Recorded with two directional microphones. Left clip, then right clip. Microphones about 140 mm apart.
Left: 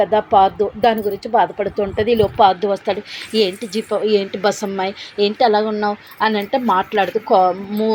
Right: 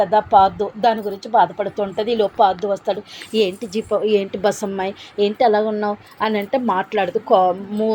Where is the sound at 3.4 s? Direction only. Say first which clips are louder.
Left 1 dB; 10° right (ahead or behind).